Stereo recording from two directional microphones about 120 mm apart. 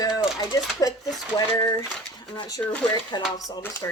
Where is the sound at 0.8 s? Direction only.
30° left (ahead or behind).